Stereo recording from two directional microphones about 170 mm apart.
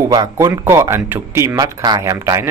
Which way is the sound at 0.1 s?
20° right (ahead or behind).